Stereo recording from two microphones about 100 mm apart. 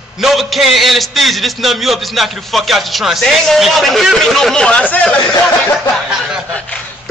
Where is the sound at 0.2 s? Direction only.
Centre (ahead or behind).